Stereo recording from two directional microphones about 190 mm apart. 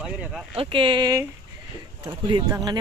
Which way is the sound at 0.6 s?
25° right (ahead or behind).